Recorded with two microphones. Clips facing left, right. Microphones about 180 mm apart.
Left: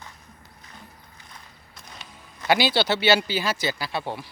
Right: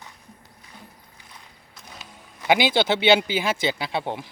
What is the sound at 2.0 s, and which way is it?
Speech, 15° right (ahead or behind).